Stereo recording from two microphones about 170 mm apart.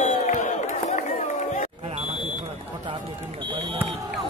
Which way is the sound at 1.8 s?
35° right (ahead or behind).